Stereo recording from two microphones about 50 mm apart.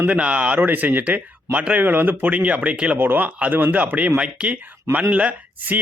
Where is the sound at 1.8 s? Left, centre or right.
Right.